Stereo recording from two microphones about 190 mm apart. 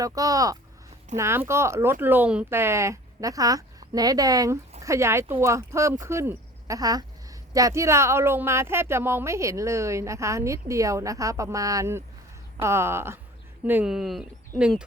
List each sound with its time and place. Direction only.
0.0 s speech: 20° right (ahead or behind); by 14.3 s centre (ahead or behind)